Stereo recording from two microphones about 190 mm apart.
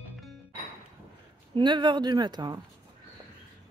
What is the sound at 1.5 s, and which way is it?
Speech, 25° right (ahead or behind).